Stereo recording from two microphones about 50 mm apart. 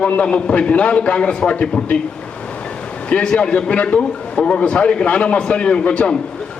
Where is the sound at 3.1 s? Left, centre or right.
Left.